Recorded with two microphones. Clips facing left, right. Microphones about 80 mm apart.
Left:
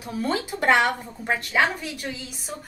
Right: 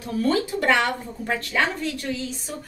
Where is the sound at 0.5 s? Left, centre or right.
Left.